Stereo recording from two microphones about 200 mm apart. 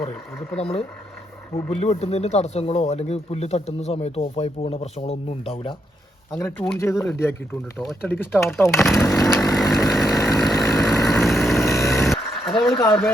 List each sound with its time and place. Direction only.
0.1 s speech: 5° left (ahead or behind)
1.8 s speech: 30° left (ahead or behind)
6.3 s speech: 5° left (ahead or behind)
9.0 s speech: 15° left (ahead or behind)
9.4 s chainsaw: centre (ahead or behind)
11.0 s vehicle: centre (ahead or behind)
11.9 s a sound: centre (ahead or behind)